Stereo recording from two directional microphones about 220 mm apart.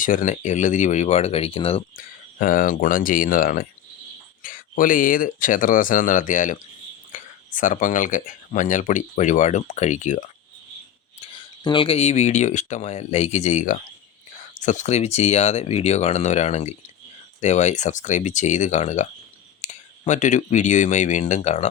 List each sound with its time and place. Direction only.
0.0 s speech: 35° left (ahead or behind)
2.4 s speech: 40° left (ahead or behind)
11.6 s speech: 20° left (ahead or behind)